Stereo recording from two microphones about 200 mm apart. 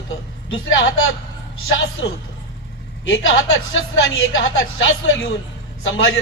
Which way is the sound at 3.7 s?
70° left (ahead or behind).